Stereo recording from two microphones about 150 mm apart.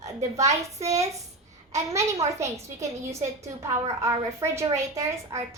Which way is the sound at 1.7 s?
20° right (ahead or behind).